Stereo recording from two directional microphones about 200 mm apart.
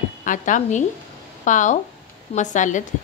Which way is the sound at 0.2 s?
40° left (ahead or behind).